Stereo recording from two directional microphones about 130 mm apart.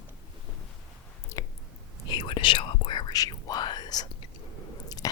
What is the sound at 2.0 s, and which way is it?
Whispering, 35° left (ahead or behind).